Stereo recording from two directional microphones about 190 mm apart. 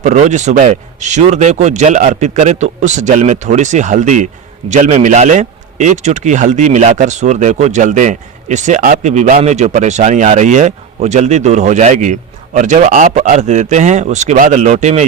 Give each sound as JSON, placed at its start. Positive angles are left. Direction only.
{"t": 0.0, "sound": "a man's voice", "side_deg": -40}